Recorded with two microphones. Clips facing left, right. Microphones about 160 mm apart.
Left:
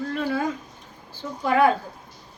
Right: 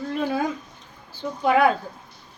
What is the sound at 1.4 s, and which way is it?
Speech, 15° right (ahead or behind).